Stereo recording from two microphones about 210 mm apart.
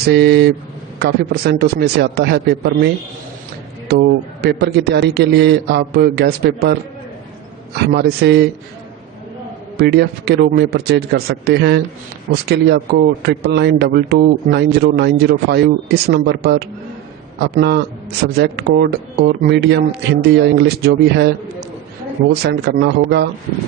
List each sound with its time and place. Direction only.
0.0 s speech: 50° right (ahead or behind)
7.9 s speech: 50° right (ahead or behind)
9.7 s speech: 50° right (ahead or behind)
22.4 s speech: 50° right (ahead or behind)